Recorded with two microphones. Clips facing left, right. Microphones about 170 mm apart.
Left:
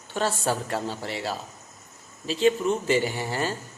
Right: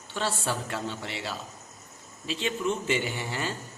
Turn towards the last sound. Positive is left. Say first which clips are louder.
# left 4 dB
turn(degrees=40)  # may be behind; listen again after turning